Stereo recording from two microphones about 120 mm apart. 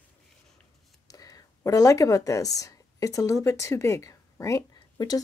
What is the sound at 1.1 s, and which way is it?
A woman's voice, 30° left (ahead or behind).